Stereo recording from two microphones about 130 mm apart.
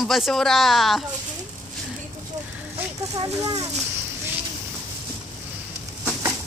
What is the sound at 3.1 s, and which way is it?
Speech, 30° right (ahead or behind).